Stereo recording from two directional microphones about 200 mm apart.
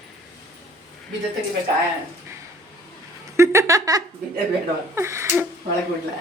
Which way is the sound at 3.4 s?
15° right (ahead or behind).